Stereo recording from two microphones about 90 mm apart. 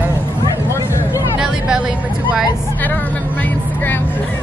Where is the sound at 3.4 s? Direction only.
20° left (ahead or behind).